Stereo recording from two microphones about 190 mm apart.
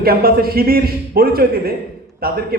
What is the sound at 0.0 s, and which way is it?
A man's voice, 55° right (ahead or behind).